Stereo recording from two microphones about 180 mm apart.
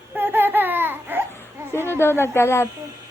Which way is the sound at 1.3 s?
15° left (ahead or behind).